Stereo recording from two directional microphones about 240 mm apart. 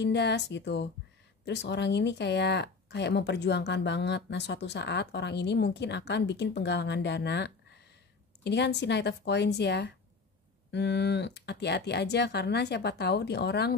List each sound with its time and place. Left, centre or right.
0.0 s speech: left